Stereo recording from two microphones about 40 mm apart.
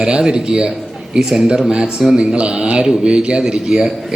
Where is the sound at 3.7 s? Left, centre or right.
Centre.